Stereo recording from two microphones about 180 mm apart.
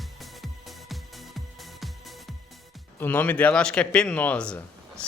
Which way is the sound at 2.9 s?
10° left (ahead or behind).